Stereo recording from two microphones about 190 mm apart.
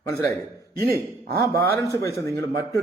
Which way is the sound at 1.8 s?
15° left (ahead or behind).